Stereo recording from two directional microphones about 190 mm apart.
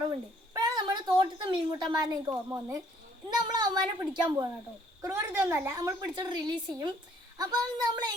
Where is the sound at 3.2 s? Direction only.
20° right (ahead or behind).